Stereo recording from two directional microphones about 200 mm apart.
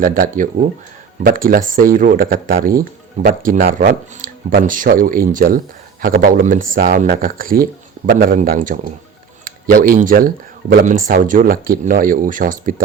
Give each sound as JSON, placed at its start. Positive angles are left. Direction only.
{"t": 0.0, "sound": "speech", "side_deg": -45}